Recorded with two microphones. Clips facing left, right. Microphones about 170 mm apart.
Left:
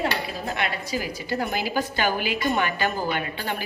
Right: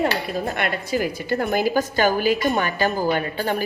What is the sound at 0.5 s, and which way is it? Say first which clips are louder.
A woman's voice: right 1 dB; 55° right (ahead or behind).